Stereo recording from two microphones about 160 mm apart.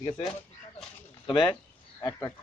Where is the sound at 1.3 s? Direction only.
30° left (ahead or behind).